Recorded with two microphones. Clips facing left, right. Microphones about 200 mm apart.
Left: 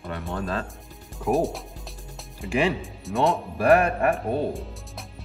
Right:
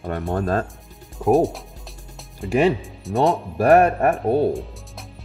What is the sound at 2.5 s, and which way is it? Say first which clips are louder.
Speech: right 6 dB; 40° right (ahead or behind).